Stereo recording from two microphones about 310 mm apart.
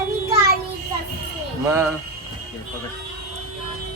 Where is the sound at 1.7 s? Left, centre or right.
Centre.